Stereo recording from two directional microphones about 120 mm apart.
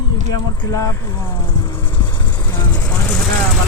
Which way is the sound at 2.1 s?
40° left (ahead or behind).